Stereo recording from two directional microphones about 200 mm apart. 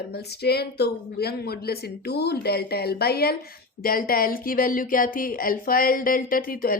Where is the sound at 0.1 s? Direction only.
55° left (ahead or behind).